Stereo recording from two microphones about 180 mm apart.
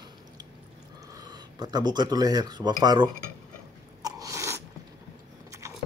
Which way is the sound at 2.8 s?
20° right (ahead or behind).